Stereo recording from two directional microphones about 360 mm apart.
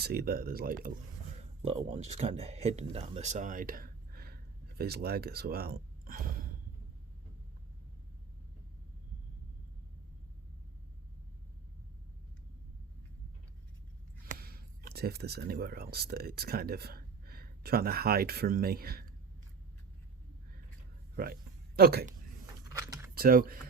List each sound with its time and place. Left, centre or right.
0.0 s speech: right
14.3 s speech: right
21.8 s speech: right
22.8 s keys jangling: centre
23.1 s speech: right